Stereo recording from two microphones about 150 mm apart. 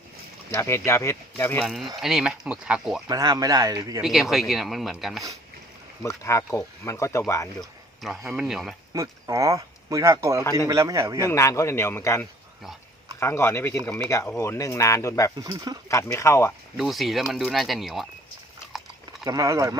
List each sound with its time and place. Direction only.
0.5 s a man's voice: 20° left (ahead or behind)
1.6 s speech: centre (ahead or behind)
3.1 s speech: 25° right (ahead or behind)
4.0 s speech: centre (ahead or behind)
6.0 s speech: 20° left (ahead or behind)
7.6 s a sound: centre (ahead or behind)
8.3 s speech: centre (ahead or behind)
8.9 s speech: 20° right (ahead or behind)
11.3 s a man's voice: 20° left (ahead or behind)
15.4 s speech: 25° right (ahead or behind)
15.9 s speech: 20° left (ahead or behind)
16.7 s speech: centre (ahead or behind)
19.2 s speech: 25° right (ahead or behind)